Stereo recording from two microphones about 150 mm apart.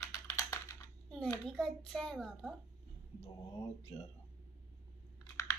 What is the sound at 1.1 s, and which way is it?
A child's voice, 5° left (ahead or behind).